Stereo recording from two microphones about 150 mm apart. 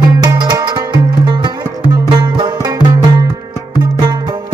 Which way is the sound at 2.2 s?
25° right (ahead or behind).